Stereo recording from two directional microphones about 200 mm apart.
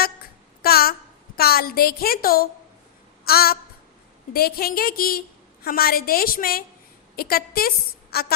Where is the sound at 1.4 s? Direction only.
50° left (ahead or behind).